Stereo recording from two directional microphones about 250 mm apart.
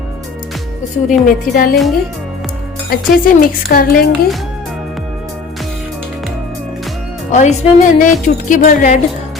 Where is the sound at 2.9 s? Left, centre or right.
Left.